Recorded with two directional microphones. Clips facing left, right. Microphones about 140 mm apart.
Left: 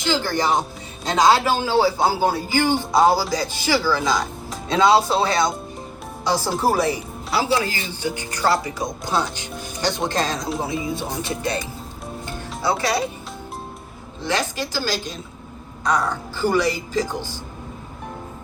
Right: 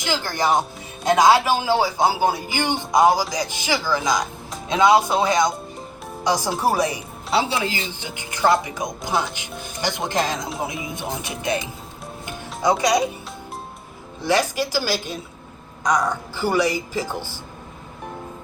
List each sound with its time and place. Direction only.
0.1 s a man's voice: 15° right (ahead or behind)
12.2 s music: 15° right (ahead or behind)
14.3 s a man's voice: 10° right (ahead or behind)
17.1 s speech: 15° left (ahead or behind)